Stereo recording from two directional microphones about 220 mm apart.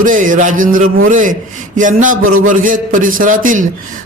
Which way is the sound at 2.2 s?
70° right (ahead or behind).